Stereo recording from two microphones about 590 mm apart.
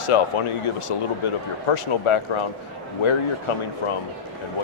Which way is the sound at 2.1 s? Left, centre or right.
Left.